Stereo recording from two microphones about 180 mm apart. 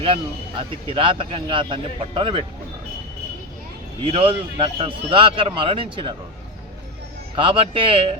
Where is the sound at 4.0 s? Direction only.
30° right (ahead or behind).